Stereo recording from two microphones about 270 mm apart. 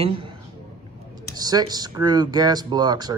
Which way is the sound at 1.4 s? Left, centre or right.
Centre.